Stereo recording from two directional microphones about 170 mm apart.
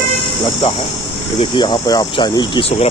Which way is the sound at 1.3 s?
25° left (ahead or behind).